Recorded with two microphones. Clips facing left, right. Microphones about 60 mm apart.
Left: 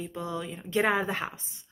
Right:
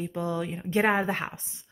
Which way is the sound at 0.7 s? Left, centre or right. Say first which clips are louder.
Right 2 dB; right.